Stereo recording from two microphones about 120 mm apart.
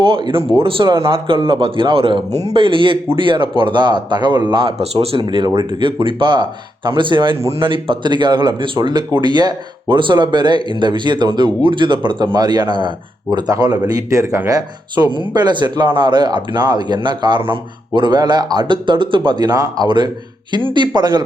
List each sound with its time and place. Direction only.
0.1 s speech: 45° right (ahead or behind)